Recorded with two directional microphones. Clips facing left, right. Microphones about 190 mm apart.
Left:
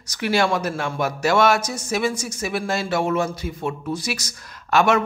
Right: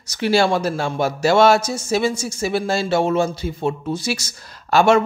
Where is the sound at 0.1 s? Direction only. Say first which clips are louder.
Right 3 dB; 30° right (ahead or behind).